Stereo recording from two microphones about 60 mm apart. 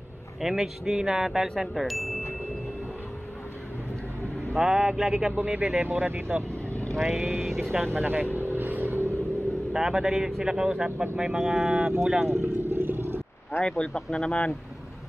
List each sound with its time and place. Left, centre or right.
0.4 s chime: centre
4.6 s speech: centre
5.4 s speech: right
5.9 s speech: right
7.0 s chime: centre
7.8 s speech: right
8.4 s vehicle: right
9.7 s speech: centre
12.3 s speech: right
12.8 s a sound: right
13.7 s speech: centre